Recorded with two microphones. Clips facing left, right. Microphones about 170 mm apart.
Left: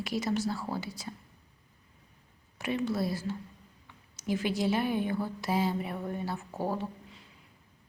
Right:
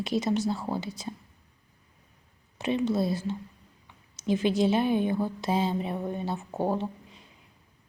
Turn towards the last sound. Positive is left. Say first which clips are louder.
# right 4 dB
turn(degrees=-20)  # may be behind; listen again after turning